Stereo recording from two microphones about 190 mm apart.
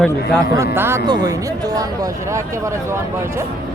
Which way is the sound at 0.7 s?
15° right (ahead or behind).